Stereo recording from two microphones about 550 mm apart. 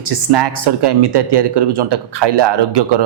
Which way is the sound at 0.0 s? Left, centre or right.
Right.